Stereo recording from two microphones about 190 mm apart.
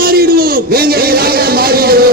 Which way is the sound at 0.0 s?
50° right (ahead or behind).